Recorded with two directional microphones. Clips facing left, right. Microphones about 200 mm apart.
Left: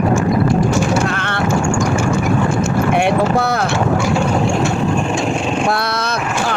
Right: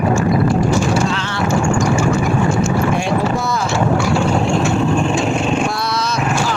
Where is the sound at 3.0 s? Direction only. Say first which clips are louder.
Left 3 dB; 60° left (ahead or behind).